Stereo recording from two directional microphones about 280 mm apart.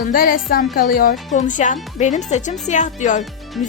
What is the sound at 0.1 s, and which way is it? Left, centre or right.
Speech, left.